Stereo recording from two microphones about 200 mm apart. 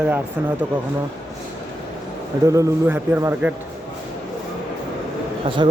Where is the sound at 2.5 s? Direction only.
15° right (ahead or behind).